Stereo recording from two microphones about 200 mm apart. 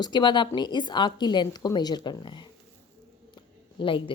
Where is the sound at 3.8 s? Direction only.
25° left (ahead or behind).